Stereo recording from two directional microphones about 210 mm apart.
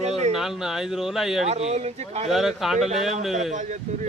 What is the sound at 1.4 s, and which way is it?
Speech, 30° right (ahead or behind).